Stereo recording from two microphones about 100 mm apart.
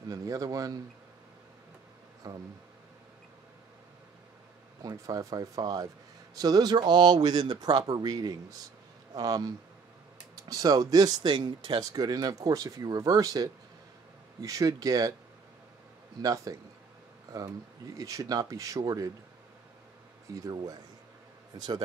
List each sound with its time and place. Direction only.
0.1 s speech: 35° right (ahead or behind)
2.2 s speech: 35° right (ahead or behind)
4.8 s a man's voice: 35° right (ahead or behind)
16.2 s speech: 35° right (ahead or behind)
17.9 s speech: 35° right (ahead or behind)
20.3 s speech: 35° right (ahead or behind)